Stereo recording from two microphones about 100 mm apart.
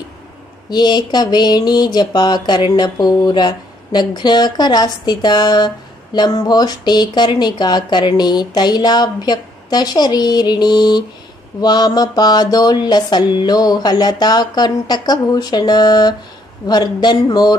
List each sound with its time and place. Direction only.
0.7 s speech: 45° left (ahead or behind)